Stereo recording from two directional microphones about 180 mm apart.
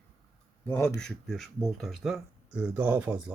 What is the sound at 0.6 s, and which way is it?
Speech, 10° left (ahead or behind).